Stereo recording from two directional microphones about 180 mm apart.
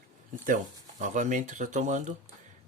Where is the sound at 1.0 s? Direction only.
45° right (ahead or behind).